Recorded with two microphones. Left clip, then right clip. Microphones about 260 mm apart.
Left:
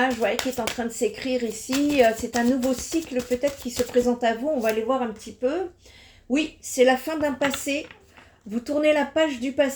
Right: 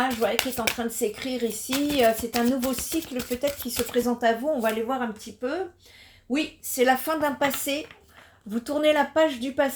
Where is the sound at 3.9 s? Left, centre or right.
Right.